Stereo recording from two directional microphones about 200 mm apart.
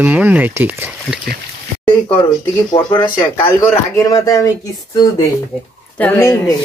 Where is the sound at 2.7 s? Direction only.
20° left (ahead or behind).